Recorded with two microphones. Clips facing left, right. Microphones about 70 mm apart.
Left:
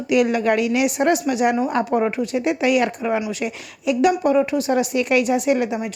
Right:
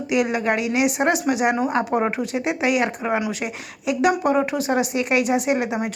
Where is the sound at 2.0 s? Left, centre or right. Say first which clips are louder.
Left 2 dB; right.